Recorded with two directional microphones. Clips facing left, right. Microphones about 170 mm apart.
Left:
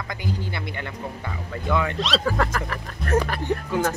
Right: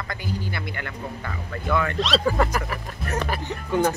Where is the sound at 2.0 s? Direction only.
Centre (ahead or behind).